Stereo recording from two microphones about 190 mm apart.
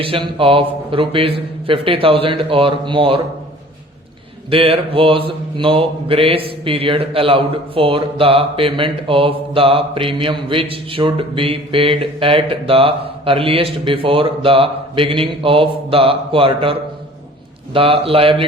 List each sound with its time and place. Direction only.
0.0 s mantra: 30° right (ahead or behind)
4.4 s mantra: 30° right (ahead or behind)
17.7 s mantra: 30° right (ahead or behind)